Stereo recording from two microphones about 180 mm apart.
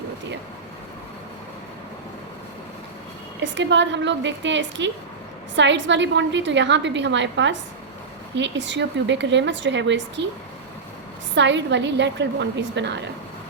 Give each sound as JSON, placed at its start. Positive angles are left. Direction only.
{"t": 3.4, "sound": "a woman's voice", "side_deg": -85}
{"t": 11.3, "sound": "a woman's voice", "side_deg": -80}